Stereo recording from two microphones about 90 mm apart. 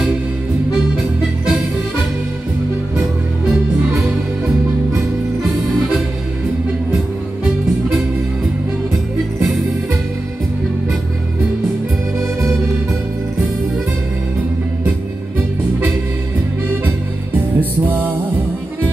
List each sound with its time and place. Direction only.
16.8 s music: 20° right (ahead or behind)